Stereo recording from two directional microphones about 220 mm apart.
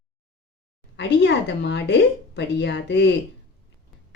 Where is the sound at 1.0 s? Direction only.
50° left (ahead or behind).